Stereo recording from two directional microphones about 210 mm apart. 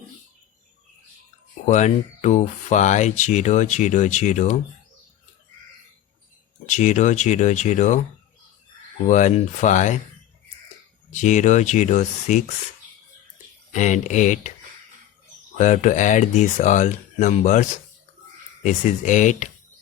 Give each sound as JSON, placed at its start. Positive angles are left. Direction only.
{"t": 1.6, "sound": "speech", "side_deg": 35}
{"t": 6.7, "sound": "speech", "side_deg": 35}
{"t": 9.0, "sound": "speech", "side_deg": 35}
{"t": 11.1, "sound": "speech", "side_deg": 35}
{"t": 13.7, "sound": "speech", "side_deg": 35}
{"t": 15.5, "sound": "speech", "side_deg": 35}